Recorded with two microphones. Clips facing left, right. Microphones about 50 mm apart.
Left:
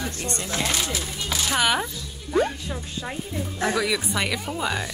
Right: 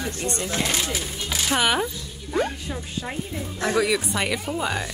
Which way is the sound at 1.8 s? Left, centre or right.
Centre.